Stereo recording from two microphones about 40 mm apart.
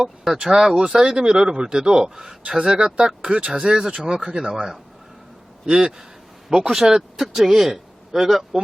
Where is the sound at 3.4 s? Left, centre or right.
Right.